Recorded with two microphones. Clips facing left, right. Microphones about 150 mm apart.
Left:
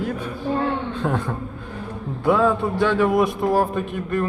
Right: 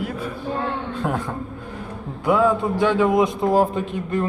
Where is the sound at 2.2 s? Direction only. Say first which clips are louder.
Even; 15° right (ahead or behind).